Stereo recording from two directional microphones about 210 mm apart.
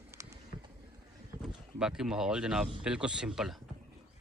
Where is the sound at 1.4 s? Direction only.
5° right (ahead or behind).